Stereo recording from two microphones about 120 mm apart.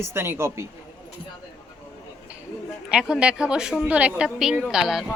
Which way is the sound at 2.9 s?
10° right (ahead or behind).